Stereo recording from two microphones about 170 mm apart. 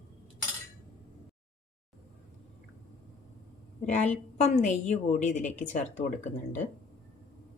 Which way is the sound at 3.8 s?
45° left (ahead or behind).